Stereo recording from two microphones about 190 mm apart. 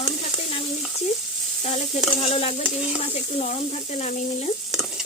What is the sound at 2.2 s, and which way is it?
Sizzle, 35° left (ahead or behind).